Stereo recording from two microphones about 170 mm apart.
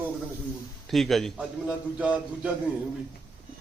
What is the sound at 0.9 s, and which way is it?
A man's voice, centre (ahead or behind).